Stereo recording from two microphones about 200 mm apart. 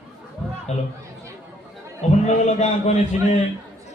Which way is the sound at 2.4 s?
35° left (ahead or behind).